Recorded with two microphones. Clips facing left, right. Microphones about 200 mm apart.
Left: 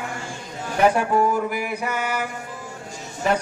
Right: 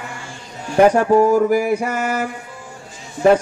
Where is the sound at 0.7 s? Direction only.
40° right (ahead or behind).